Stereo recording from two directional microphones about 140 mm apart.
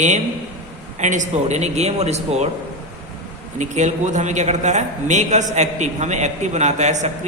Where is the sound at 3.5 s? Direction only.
60° right (ahead or behind).